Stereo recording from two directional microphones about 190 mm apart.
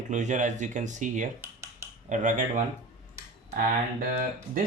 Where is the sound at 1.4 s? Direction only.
15° right (ahead or behind).